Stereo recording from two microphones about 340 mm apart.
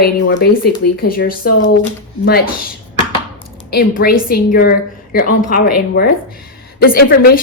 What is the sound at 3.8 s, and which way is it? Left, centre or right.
A woman's voice, left.